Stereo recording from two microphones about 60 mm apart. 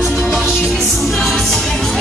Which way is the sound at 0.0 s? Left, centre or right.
Centre.